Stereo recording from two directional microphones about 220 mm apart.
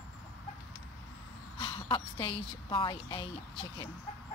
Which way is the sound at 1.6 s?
25° left (ahead or behind).